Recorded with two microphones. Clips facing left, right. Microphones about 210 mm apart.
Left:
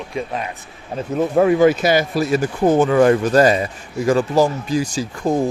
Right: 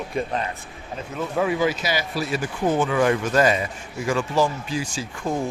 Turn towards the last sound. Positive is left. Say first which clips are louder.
# left 7 dB
turn(degrees=40)  # may be behind; listen again after turning